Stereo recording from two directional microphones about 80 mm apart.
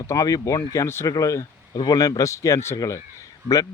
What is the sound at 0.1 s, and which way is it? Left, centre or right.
Speech, left.